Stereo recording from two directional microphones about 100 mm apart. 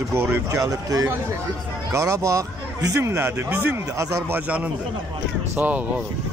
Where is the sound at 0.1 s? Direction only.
25° right (ahead or behind).